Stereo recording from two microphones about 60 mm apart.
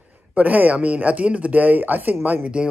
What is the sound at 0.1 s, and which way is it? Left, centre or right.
Speech, right.